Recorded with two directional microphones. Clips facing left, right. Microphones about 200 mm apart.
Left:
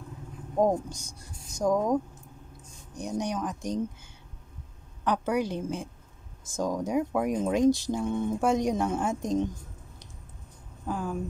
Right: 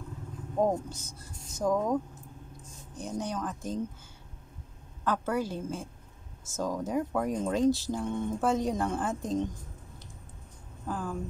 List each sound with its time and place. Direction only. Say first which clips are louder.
0.6 s speech: left 3 dB; 15° left (ahead or behind)
3.3 s speech: left 3 dB; 15° left (ahead or behind)
5.0 s speech: left 3 dB; 15° left (ahead or behind)
10.9 s speech: left 3 dB; 10° left (ahead or behind)